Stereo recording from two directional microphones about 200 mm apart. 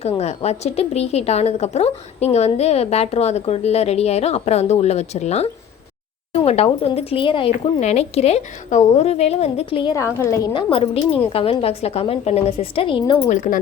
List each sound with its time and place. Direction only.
0.0 s a woman's voice: 30° left (ahead or behind)
13.2 s a woman's voice: 40° left (ahead or behind)